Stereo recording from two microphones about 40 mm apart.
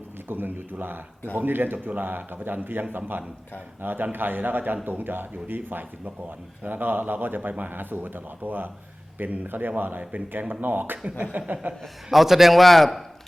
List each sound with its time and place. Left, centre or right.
0.3 s a man's voice: right
6.2 s a man's voice: right
10.0 s chuckle: right
10.5 s a man's voice: right
11.2 s chuckle: right
12.1 s a man's voice: centre